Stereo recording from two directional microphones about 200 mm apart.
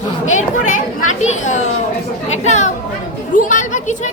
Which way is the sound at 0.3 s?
40° left (ahead or behind).